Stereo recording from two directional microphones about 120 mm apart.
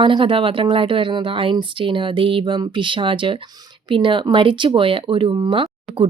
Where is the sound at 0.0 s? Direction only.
45° right (ahead or behind).